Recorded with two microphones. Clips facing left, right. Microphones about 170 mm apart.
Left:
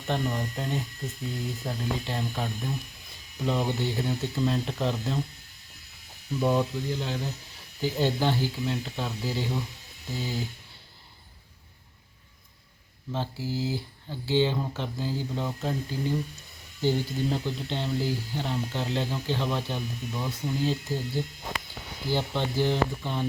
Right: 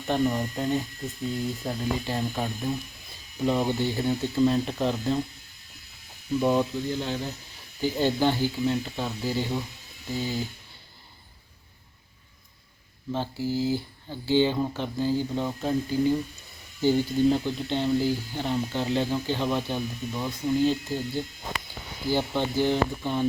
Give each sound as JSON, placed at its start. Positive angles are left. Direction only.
{"t": 0.1, "sound": "speech", "side_deg": -5}
{"t": 6.4, "sound": "speech", "side_deg": -5}
{"t": 13.1, "sound": "speech", "side_deg": 0}